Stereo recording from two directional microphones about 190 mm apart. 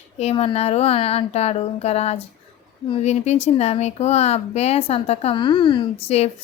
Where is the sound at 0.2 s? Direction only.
30° left (ahead or behind).